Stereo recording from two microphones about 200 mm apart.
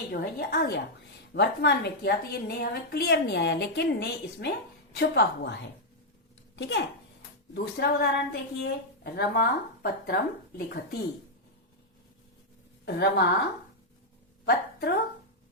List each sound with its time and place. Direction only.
0.1 s a woman's voice: 50° left (ahead or behind)
12.8 s a woman's voice: 55° left (ahead or behind)